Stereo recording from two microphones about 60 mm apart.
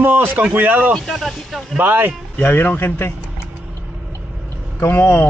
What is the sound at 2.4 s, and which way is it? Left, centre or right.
Speech, left.